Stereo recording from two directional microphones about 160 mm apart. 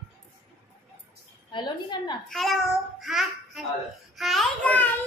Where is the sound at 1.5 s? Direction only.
30° left (ahead or behind).